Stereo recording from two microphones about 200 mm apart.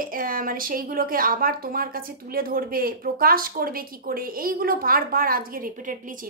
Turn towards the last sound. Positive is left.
turn(degrees=-45)  # may be behind; listen again after turning